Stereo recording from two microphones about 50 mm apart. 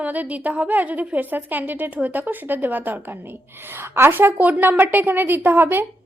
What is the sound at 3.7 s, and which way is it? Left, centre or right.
Speech, right.